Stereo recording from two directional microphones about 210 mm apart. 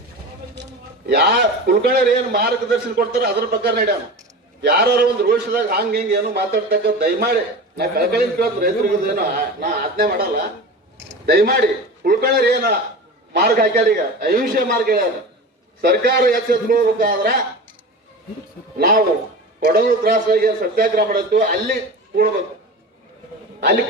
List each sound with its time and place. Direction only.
1.0 s a man's voice: 50° right (ahead or behind)
11.3 s a man's voice: 45° right (ahead or behind)
18.8 s a man's voice: 45° right (ahead or behind)